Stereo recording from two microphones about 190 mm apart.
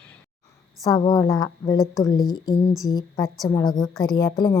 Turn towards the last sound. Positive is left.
turn(degrees=20)  # may be behind; listen again after turning